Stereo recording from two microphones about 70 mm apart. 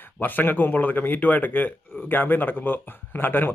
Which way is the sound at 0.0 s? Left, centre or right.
Left.